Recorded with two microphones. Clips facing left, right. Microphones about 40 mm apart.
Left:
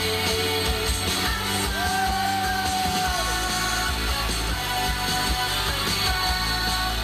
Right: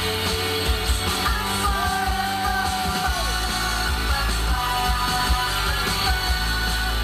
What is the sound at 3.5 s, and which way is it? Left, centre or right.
Music, left.